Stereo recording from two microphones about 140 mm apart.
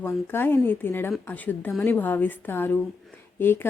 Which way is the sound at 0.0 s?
15° left (ahead or behind).